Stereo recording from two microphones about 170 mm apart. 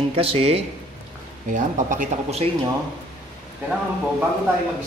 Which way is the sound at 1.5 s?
50° right (ahead or behind).